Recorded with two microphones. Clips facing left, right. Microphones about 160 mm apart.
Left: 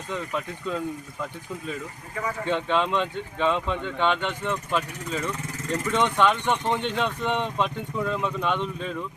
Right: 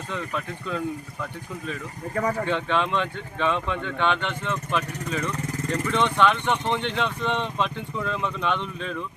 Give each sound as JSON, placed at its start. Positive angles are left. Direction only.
{"t": 0.1, "sound": "speech", "side_deg": 15}
{"t": 2.1, "sound": "speech", "side_deg": -40}
{"t": 2.5, "sound": "speech", "side_deg": 15}